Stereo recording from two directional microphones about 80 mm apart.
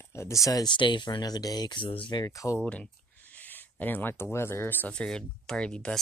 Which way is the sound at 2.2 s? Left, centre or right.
Left.